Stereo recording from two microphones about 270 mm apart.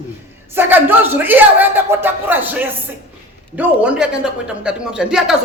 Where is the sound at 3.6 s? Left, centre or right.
Centre.